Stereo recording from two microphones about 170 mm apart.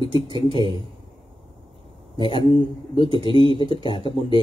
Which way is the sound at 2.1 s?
30° left (ahead or behind).